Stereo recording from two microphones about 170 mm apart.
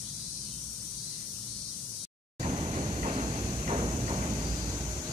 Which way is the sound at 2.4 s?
40° right (ahead or behind).